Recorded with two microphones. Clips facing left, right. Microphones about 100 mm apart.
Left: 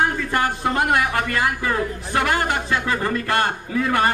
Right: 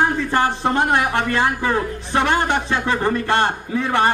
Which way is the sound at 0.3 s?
30° right (ahead or behind).